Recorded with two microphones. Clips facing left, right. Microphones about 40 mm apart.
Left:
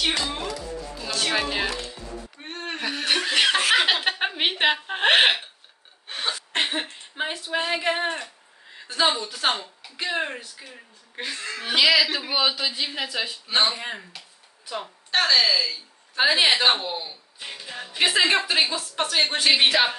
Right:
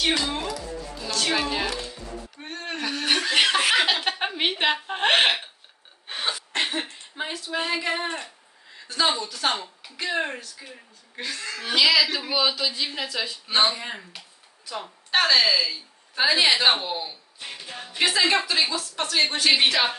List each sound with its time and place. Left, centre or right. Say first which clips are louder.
0.1 s speech: right 2 dB; centre
1.0 s a woman's voice: even; centre
6.0 s gasp: even; centre
6.5 s speech: left 3 dB; left
7.5 s a woman's voice: left 2 dB; centre
15.0 s speech: right 1 dB; centre
16.2 s a woman's voice: left 1 dB; left
16.6 s speech: even; centre
17.5 s a woman's voice: left 1 dB; centre